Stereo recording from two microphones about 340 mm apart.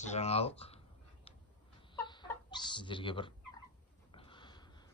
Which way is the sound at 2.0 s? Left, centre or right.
Centre.